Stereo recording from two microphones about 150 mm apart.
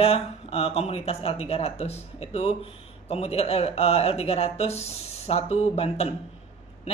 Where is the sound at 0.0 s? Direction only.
40° left (ahead or behind).